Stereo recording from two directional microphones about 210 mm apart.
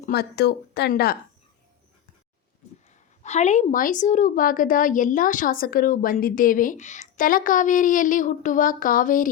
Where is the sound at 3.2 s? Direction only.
35° left (ahead or behind).